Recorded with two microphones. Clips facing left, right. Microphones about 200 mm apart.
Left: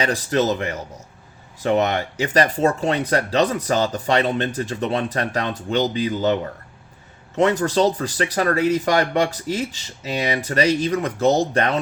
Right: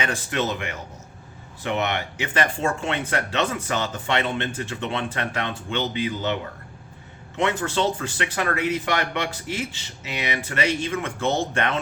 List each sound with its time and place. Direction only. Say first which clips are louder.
0.0 s speech: left 6 dB; 35° left (ahead or behind)